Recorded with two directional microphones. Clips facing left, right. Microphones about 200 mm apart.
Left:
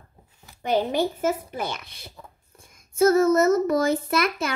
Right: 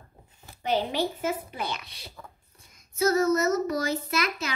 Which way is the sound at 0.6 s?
50° left (ahead or behind).